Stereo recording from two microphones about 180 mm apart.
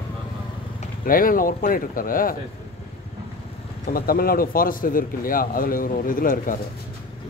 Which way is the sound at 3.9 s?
55° left (ahead or behind).